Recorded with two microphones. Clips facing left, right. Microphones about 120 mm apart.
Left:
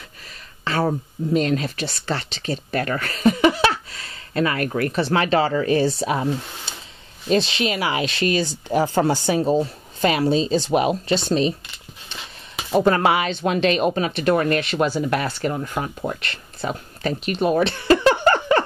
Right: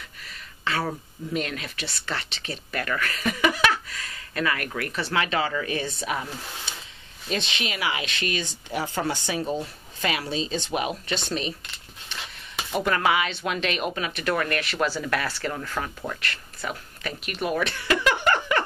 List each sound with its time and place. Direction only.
0.7 s speech: 35° left (ahead or behind)
12.7 s speech: 30° left (ahead or behind)